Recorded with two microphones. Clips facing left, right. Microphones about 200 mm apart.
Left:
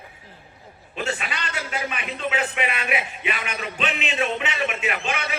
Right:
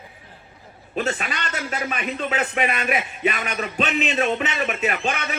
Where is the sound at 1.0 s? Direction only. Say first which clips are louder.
Right 3 dB; 40° right (ahead or behind).